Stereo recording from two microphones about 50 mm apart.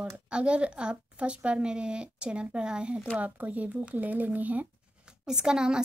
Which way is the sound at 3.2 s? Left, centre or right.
Right.